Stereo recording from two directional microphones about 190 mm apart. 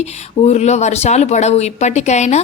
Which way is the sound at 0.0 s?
35° left (ahead or behind).